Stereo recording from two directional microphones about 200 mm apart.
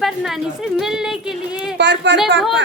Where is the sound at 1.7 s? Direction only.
60° right (ahead or behind).